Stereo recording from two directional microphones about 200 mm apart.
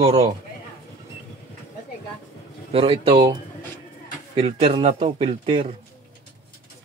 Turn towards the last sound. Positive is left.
turn(degrees=-30)  # may be behind; listen again after turning